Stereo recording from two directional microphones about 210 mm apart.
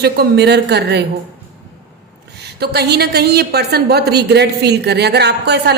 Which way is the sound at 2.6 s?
50° right (ahead or behind).